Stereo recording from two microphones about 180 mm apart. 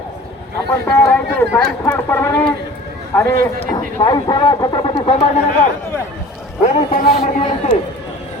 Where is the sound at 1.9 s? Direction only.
15° left (ahead or behind).